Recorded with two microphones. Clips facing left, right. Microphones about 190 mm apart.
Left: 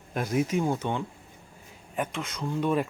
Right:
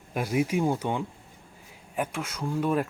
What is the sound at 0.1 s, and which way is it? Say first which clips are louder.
Speech: even; 10° right (ahead or behind).